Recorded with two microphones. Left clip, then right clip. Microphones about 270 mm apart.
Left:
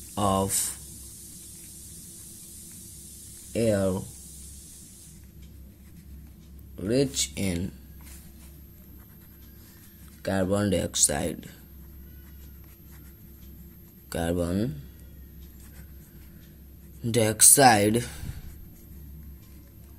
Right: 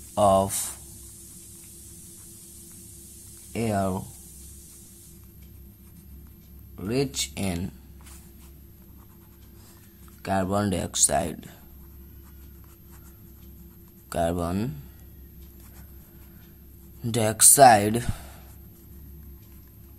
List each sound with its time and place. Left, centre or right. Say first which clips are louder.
0.1 s speech: right 6 dB; centre
3.5 s speech: left 2 dB; centre
6.8 s speech: left 2 dB; centre
10.2 s speech: right 1 dB; centre
14.0 s speech: right 3 dB; centre
17.0 s speech: even; centre